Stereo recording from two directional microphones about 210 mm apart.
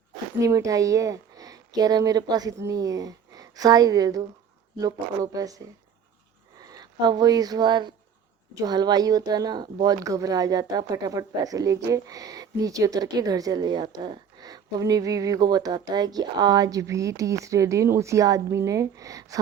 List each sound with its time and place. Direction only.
0.3 s a woman's voice: 15° right (ahead or behind)